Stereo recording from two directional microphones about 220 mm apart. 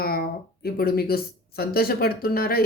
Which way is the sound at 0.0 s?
45° left (ahead or behind).